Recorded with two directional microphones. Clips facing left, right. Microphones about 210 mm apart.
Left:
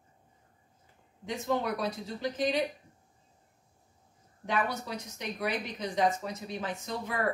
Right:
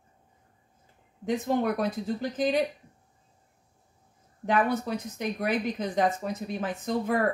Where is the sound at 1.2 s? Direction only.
55° right (ahead or behind).